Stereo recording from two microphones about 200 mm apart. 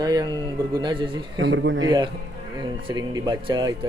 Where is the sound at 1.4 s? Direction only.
65° right (ahead or behind).